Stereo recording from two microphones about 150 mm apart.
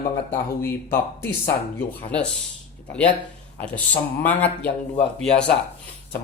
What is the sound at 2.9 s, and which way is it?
A man's voice, 10° left (ahead or behind).